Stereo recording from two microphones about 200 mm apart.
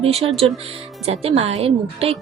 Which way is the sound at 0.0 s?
30° right (ahead or behind).